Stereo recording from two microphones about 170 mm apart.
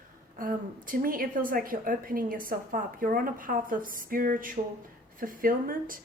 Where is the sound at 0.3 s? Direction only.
55° right (ahead or behind).